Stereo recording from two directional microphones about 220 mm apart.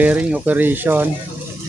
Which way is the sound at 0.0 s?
5° right (ahead or behind).